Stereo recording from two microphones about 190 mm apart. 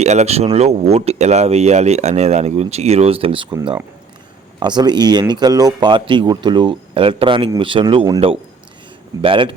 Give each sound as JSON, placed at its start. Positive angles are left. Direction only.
{"t": 0.0, "sound": "speech", "side_deg": -35}